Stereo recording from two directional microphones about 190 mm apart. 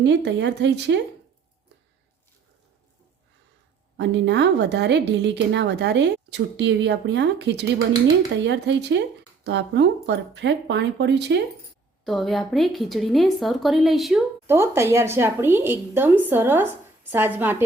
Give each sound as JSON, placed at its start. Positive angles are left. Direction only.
{"t": 0.0, "sound": "speech", "side_deg": -65}
{"t": 3.9, "sound": "speech", "side_deg": -65}
{"t": 12.0, "sound": "speech", "side_deg": 0}
{"t": 14.4, "sound": "a woman's voice", "side_deg": -15}